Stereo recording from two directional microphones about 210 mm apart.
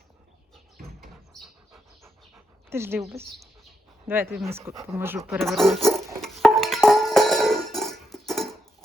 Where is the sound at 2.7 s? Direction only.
10° right (ahead or behind).